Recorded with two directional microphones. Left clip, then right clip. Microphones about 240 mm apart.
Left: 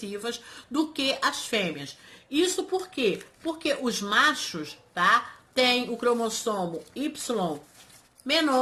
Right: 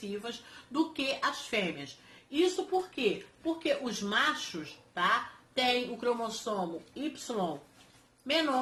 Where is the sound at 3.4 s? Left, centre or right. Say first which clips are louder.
Left 4 dB; left.